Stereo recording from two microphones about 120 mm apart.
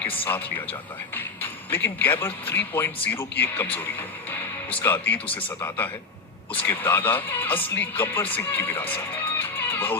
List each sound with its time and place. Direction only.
0.3 s speech: 15° left (ahead or behind)
4.3 s music: 15° left (ahead or behind)
5.5 s speech: 20° left (ahead or behind)
9.4 s music: 15° left (ahead or behind)